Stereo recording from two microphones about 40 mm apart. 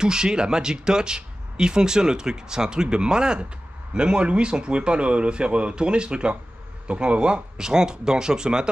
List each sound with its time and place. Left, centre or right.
0.0 s speech: centre